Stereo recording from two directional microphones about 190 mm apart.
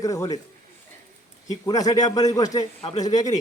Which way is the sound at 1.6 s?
20° left (ahead or behind).